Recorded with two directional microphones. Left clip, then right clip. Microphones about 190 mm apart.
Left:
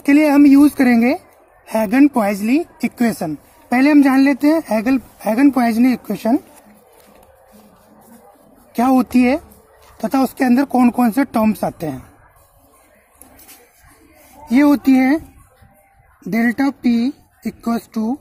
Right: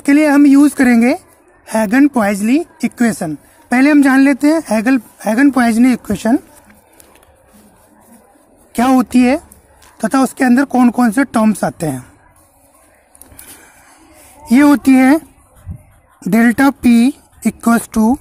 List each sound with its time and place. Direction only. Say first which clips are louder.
0.0 s a woman's voice: right 2 dB; 25° right (ahead or behind)
8.7 s a woman's voice: right 3 dB; 30° right (ahead or behind)
14.5 s speech: right 4 dB; 35° right (ahead or behind)